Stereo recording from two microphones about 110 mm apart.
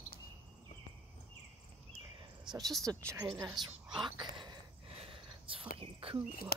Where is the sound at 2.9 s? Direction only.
25° right (ahead or behind).